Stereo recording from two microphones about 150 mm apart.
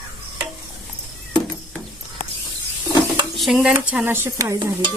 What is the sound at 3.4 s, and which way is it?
Speech, centre (ahead or behind).